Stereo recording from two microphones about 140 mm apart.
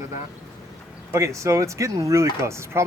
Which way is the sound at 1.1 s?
20° right (ahead or behind).